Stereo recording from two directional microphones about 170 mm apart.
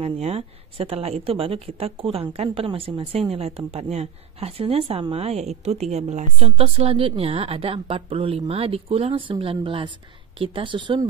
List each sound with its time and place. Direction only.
0.0 s a woman's voice: 35° right (ahead or behind)